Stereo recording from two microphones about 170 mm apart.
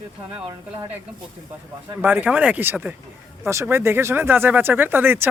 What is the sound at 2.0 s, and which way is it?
Speech, 10° right (ahead or behind).